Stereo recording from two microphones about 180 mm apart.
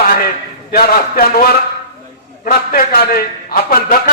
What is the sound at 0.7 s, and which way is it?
Speech, 55° left (ahead or behind).